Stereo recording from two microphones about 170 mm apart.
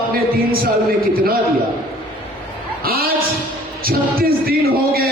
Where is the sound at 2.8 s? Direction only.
60° right (ahead or behind).